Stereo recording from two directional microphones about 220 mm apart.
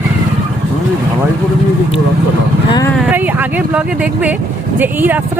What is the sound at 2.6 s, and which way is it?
Speech, 20° left (ahead or behind).